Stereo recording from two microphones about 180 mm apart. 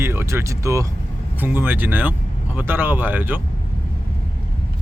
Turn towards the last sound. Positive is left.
turn(degrees=-10)  # may be behind; listen again after turning